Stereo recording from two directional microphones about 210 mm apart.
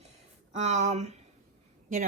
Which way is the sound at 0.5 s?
35° right (ahead or behind).